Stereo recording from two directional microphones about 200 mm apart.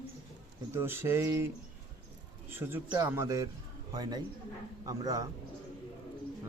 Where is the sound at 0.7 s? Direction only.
10° right (ahead or behind).